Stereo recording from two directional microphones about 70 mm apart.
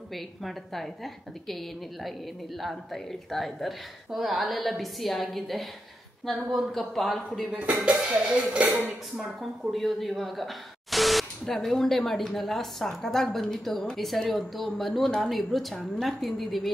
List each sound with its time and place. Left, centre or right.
0.1 s speech: centre
2.6 s speech: centre
7.8 s music: centre
9.4 s speech: centre